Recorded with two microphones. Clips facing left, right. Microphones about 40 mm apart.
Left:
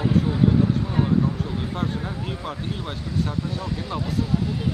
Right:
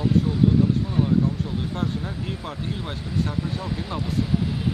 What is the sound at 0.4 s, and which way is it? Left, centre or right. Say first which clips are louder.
Speech: even; centre.